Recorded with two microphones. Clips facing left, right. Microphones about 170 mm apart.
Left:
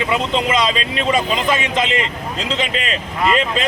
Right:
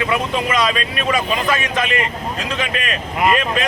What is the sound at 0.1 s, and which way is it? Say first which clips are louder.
Speech: left 1 dB; 20° left (ahead or behind).